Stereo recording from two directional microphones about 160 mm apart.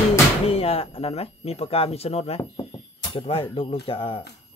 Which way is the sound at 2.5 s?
35° left (ahead or behind).